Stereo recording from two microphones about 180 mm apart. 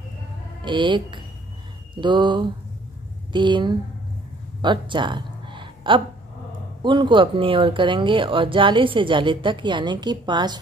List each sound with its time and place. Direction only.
0.7 s speech: 25° right (ahead or behind)
4.6 s a sound: 25° right (ahead or behind)
6.8 s speech: 25° right (ahead or behind)